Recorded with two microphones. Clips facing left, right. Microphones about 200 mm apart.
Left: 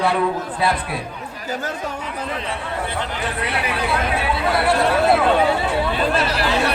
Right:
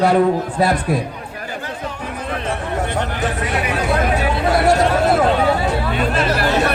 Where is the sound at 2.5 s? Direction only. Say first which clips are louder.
Right 4 dB; 45° right (ahead or behind).